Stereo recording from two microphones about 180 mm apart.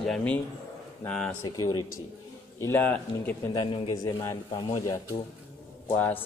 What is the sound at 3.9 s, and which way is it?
A man's voice, 15° left (ahead or behind).